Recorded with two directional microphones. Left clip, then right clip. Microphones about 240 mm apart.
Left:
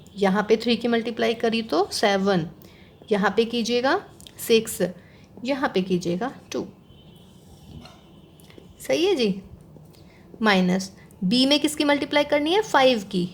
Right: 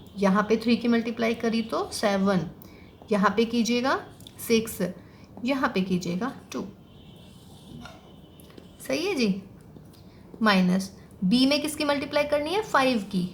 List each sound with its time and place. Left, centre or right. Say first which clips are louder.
0.2 s a woman's voice: left 3 dB; left
8.9 s a woman's voice: left 6 dB; left
10.4 s a woman's voice: left 2 dB; left